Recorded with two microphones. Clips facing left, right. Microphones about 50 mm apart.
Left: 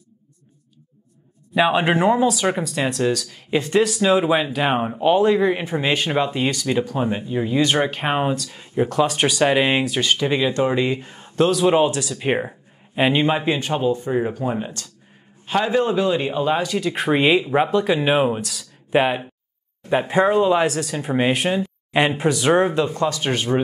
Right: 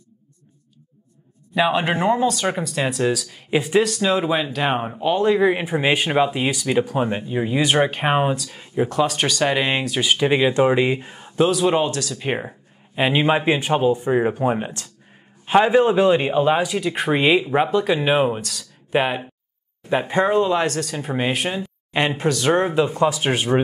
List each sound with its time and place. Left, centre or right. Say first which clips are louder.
1.5 s speech: left 2 dB; centre
10.1 s a man's voice: right 5 dB; right
11.3 s speech: left 1 dB; centre
13.5 s a man's voice: right 2 dB; centre
22.8 s a man's voice: right 2 dB; centre